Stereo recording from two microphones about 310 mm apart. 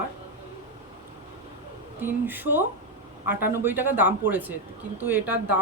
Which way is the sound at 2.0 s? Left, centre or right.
Centre.